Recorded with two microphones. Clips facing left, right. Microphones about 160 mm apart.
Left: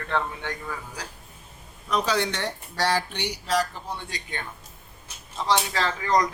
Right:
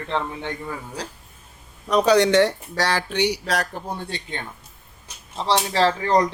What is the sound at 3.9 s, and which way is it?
Speech, 35° right (ahead or behind).